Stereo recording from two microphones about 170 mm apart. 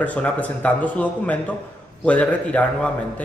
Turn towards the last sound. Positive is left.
turn(degrees=5)  # may be behind; listen again after turning